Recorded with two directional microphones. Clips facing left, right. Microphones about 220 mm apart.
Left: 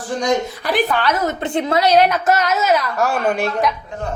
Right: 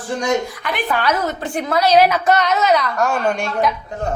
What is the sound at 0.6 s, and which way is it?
Speech, 35° left (ahead or behind).